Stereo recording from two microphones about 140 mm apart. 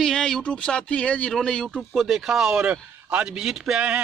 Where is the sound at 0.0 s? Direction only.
5° left (ahead or behind).